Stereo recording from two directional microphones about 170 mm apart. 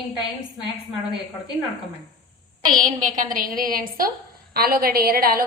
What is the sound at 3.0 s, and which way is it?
A woman's voice, 50° right (ahead or behind).